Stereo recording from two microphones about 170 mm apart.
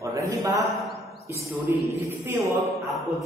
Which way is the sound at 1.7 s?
15° right (ahead or behind).